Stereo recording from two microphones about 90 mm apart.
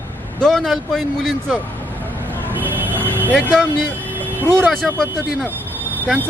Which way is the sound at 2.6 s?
20° right (ahead or behind).